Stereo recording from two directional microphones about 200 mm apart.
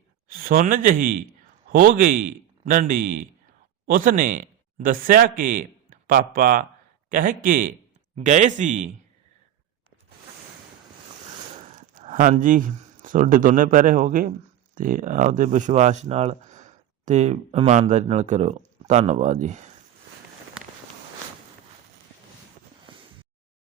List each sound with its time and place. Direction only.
0.3 s a man's voice: 45° right (ahead or behind)
11.5 s speech: 40° right (ahead or behind)